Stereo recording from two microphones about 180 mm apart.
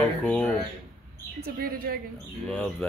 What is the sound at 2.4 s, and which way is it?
Speech, 5° left (ahead or behind).